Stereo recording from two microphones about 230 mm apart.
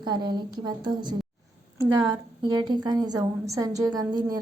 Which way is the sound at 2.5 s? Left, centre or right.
Centre.